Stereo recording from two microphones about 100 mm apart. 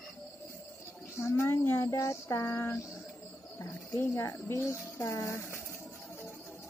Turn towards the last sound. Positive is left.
turn(degrees=25)  # may be behind; listen again after turning